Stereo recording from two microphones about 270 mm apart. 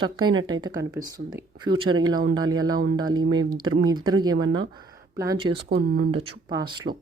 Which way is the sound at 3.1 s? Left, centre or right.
Right.